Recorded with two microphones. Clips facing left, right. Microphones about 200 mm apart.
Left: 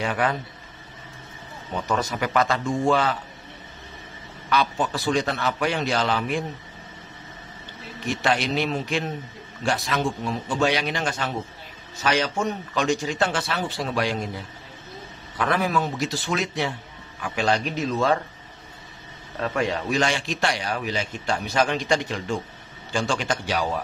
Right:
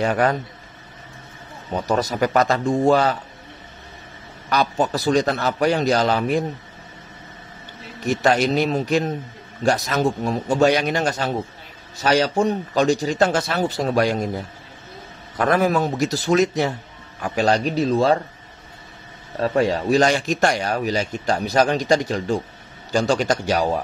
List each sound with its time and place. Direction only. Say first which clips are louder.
0.0 s speech: right 5 dB; 40° right (ahead or behind)
1.8 s speech: right 5 dB; 35° right (ahead or behind)
4.5 s speech: right 3 dB; 40° right (ahead or behind)
8.0 s a man's voice: right 6 dB; 40° right (ahead or behind)
19.4 s speech: right 6 dB; 35° right (ahead or behind)